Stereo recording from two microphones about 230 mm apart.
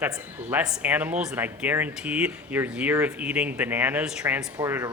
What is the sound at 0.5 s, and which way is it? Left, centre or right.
Speech, centre.